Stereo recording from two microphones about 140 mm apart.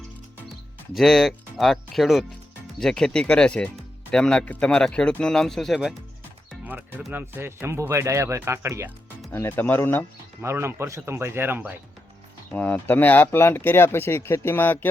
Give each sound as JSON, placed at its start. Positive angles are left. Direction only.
{"t": 0.9, "sound": "speech", "side_deg": 0}
{"t": 7.1, "sound": "speech", "side_deg": -15}
{"t": 9.3, "sound": "speech", "side_deg": 15}
{"t": 10.4, "sound": "speech", "side_deg": -20}
{"t": 12.5, "sound": "speech", "side_deg": 10}